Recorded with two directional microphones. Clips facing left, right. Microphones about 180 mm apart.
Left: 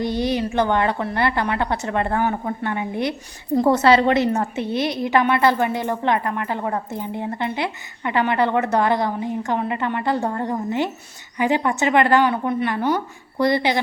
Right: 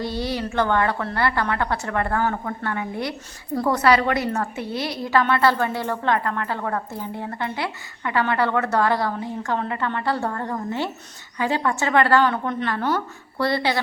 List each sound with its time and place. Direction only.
0.0 s a woman's voice: 20° left (ahead or behind)